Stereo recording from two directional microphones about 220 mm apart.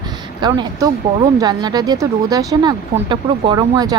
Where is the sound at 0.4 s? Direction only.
20° right (ahead or behind).